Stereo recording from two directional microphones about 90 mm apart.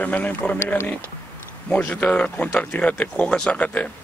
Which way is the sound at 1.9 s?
15° left (ahead or behind).